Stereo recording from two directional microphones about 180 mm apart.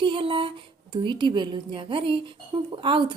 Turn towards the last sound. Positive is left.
turn(degrees=-25)  # may be behind; listen again after turning